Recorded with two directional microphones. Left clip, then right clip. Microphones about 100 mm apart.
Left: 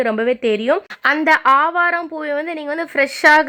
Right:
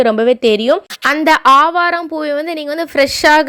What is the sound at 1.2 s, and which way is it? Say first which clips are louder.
A woman's voice: right 5 dB; 35° right (ahead or behind).